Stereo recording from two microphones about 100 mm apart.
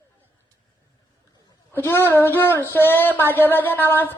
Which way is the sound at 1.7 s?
20° left (ahead or behind).